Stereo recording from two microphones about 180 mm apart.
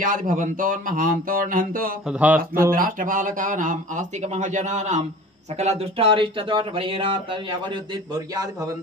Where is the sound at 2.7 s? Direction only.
50° right (ahead or behind).